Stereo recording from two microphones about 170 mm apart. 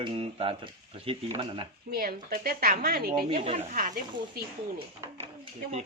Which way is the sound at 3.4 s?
35° right (ahead or behind).